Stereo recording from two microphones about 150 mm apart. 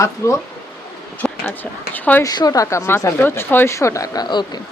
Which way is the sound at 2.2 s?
25° left (ahead or behind).